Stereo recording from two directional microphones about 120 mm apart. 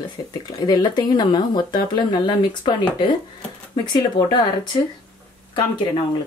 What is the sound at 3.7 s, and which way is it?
Speech, 35° left (ahead or behind).